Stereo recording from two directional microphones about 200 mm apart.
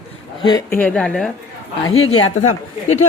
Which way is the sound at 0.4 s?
20° left (ahead or behind).